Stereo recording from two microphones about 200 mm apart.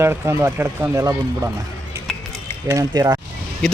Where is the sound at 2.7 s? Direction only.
15° right (ahead or behind).